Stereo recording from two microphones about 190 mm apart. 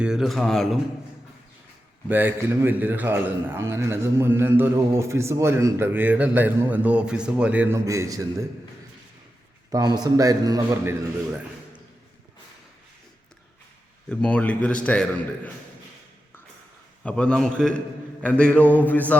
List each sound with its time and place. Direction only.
0.0 s a man's voice: centre (ahead or behind)
2.0 s a man's voice: 10° right (ahead or behind)
9.7 s a man's voice: 20° right (ahead or behind)
14.1 s a man's voice: 5° left (ahead or behind)
17.0 s a man's voice: 5° left (ahead or behind)
18.2 s a sound: 5° left (ahead or behind)